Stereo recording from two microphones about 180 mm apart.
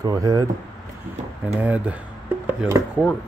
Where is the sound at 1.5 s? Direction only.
10° right (ahead or behind).